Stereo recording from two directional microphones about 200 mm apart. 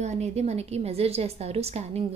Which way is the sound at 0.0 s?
35° right (ahead or behind).